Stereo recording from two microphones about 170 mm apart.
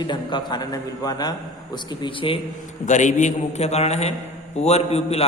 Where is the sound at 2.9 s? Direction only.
45° left (ahead or behind).